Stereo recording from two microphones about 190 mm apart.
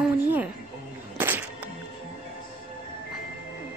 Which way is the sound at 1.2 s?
10° right (ahead or behind).